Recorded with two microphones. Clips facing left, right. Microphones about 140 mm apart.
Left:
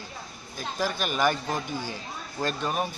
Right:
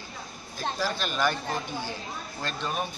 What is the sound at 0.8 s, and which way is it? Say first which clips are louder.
Speech: left 3 dB; 10° left (ahead or behind).